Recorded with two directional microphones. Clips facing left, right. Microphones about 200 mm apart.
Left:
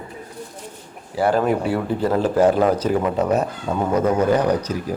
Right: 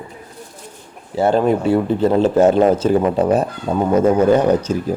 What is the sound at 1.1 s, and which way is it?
A man's voice, 25° right (ahead or behind).